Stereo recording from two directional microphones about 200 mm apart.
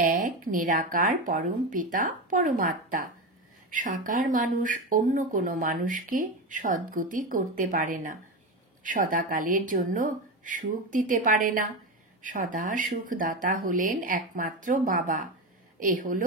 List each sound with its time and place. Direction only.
0.0 s speech: 45° right (ahead or behind)